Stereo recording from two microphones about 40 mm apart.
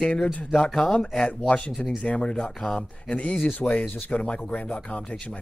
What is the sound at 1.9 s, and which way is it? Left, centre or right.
Speech, left.